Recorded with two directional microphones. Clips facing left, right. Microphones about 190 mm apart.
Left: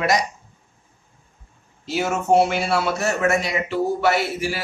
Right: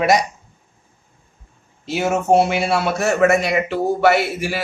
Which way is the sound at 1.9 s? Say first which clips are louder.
Right 3 dB; 60° right (ahead or behind).